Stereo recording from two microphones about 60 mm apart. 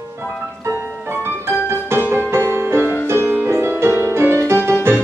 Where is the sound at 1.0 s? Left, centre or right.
Right.